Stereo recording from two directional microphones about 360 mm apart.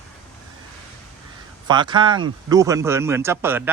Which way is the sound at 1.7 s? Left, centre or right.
Centre.